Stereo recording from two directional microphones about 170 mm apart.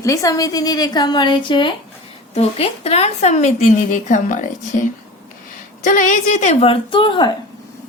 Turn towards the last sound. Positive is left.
turn(degrees=30)  # may be behind; listen again after turning